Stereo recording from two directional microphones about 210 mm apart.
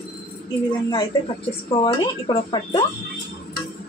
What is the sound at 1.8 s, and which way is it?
A woman's voice, 20° left (ahead or behind).